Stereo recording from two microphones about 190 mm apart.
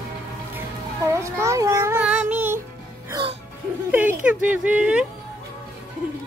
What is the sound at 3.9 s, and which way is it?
Speech, 10° right (ahead or behind).